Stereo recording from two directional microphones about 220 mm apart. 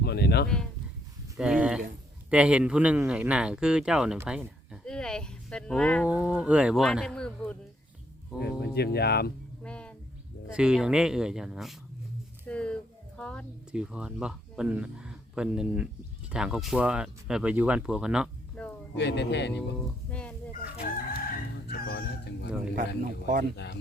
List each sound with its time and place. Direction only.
0.0 s a sound: 45° left (ahead or behind)
0.4 s speech: 5° left (ahead or behind)
4.9 s a sound: 5° left (ahead or behind)
6.1 s speech: 5° right (ahead or behind)
8.4 s speech: 45° left (ahead or behind)
9.6 s bird: 5° left (ahead or behind)
10.5 s speech: 5° right (ahead or behind)
12.5 s a sound: 5° left (ahead or behind)
16.3 s speech: centre (ahead or behind)
18.9 s speech: 50° left (ahead or behind)
20.1 s fowl: 5° left (ahead or behind)
21.1 s chicken: 40° left (ahead or behind)
23.2 s speech: 40° right (ahead or behind)